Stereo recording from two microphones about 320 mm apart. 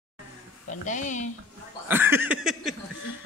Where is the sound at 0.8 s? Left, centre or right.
Left.